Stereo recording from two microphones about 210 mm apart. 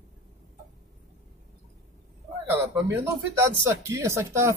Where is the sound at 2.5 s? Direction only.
15° right (ahead or behind).